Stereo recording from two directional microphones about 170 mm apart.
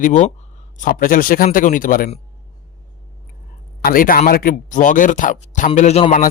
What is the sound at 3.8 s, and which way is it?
A man's voice, 55° left (ahead or behind).